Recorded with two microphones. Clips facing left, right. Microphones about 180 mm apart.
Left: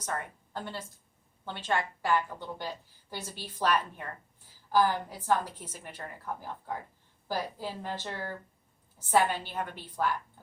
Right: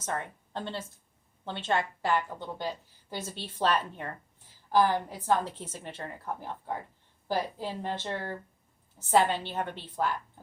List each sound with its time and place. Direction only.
0.0 s a woman's voice: 25° right (ahead or behind)
7.3 s a woman's voice: 20° right (ahead or behind)